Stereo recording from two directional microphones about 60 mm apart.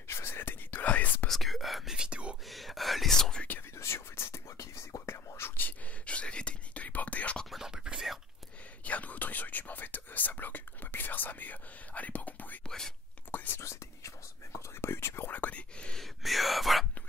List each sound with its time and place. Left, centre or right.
0.1 s whispering: left
1.2 s whispering: centre
2.5 s whispering: centre
3.7 s whispering: left
4.6 s whispering: left
5.0 s whispering: left
5.6 s whispering: left
7.5 s whispering: centre
8.8 s whispering: left
12.6 s whispering: centre
13.3 s whispering: left
13.6 s whispering: left
15.3 s whispering: left
16.0 s whispering: centre